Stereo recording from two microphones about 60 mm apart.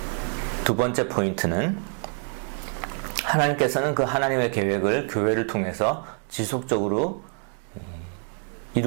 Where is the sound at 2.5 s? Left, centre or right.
Centre.